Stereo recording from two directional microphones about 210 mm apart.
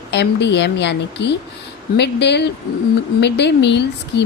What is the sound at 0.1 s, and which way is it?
A woman's voice, 55° left (ahead or behind).